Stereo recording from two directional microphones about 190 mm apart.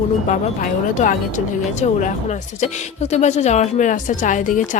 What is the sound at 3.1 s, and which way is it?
A woman's voice, 35° left (ahead or behind).